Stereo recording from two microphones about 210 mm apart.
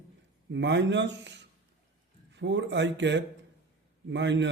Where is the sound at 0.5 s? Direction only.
55° right (ahead or behind).